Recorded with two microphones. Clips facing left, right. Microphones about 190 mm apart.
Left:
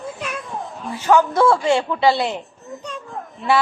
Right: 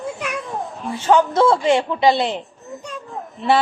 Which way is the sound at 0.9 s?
30° right (ahead or behind).